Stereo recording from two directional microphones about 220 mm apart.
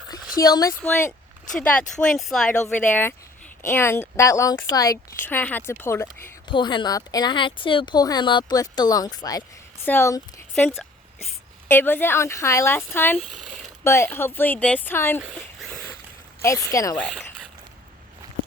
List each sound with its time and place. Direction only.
0.1 s a woman's voice: 15° left (ahead or behind)
15.4 s a sound: 10° left (ahead or behind)
16.4 s speech: 15° left (ahead or behind)